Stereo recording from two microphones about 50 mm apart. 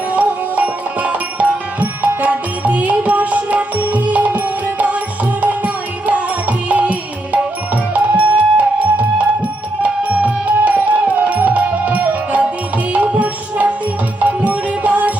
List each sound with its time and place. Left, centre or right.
0.2 s music: right
7.9 s music: right